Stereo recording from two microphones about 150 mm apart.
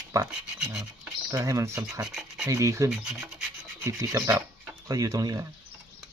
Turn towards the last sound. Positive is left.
turn(degrees=-20)  # may be behind; listen again after turning